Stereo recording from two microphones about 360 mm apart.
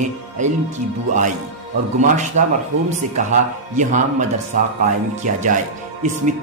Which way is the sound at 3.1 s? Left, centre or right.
Right.